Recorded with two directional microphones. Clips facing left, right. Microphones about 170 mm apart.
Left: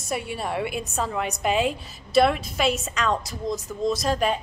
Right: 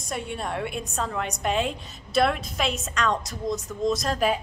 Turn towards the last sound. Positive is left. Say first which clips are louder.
# left 1 dB
turn(degrees=0)  # may be behind; listen again after turning